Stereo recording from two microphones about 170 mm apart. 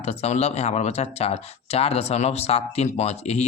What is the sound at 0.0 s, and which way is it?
Speech, 40° left (ahead or behind).